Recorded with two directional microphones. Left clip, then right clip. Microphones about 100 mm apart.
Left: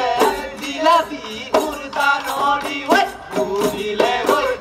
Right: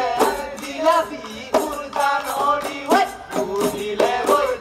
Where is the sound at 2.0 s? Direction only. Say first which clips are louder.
Left 2 dB; 20° left (ahead or behind).